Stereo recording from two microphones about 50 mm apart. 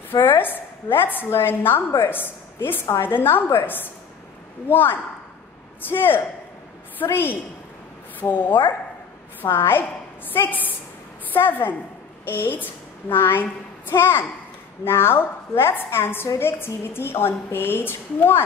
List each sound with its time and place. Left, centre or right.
0.2 s a woman's voice: left
9.4 s a woman's voice: left
10.3 s a woman's voice: left